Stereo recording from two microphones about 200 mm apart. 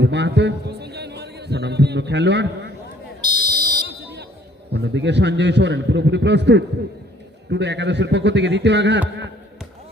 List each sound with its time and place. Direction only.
0.0 s a sound: 60° right (ahead or behind)
3.2 s buzzer: 20° right (ahead or behind)
3.8 s smoke detector: 55° right (ahead or behind)
4.7 s a man's voice: 60° right (ahead or behind)